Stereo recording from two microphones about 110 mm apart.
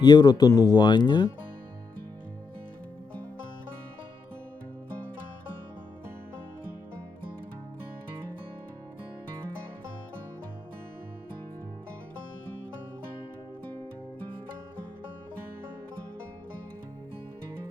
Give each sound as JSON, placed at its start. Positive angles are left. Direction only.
{"t": 0.0, "sound": "speech", "side_deg": 40}